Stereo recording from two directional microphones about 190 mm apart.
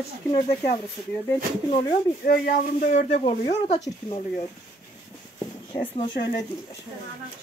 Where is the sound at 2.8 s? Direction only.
40° left (ahead or behind).